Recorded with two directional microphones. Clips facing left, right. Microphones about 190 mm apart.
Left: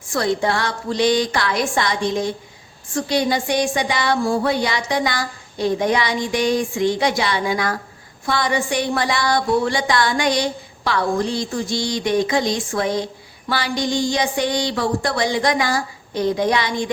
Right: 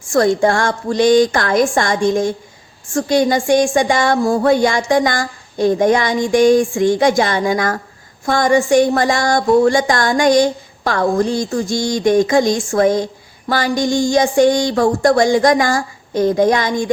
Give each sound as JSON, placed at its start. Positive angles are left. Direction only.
{"t": 0.1, "sound": "speech", "side_deg": -45}